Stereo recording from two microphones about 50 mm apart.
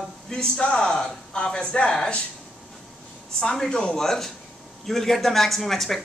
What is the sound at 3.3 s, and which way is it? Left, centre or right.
Speech, centre.